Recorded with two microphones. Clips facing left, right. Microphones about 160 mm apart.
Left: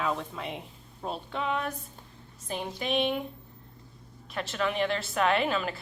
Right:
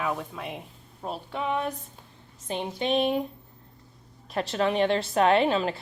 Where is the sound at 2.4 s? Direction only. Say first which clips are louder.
Right 4 dB; 25° right (ahead or behind).